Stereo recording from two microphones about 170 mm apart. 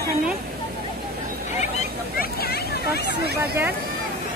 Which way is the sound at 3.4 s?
15° right (ahead or behind).